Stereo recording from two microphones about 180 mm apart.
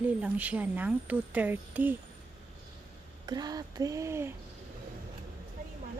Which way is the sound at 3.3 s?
20° right (ahead or behind).